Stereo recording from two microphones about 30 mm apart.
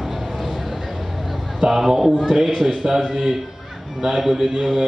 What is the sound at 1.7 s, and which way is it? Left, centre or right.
Speech, centre.